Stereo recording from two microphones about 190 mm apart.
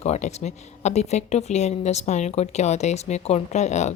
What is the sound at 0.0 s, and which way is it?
Speech, 35° left (ahead or behind).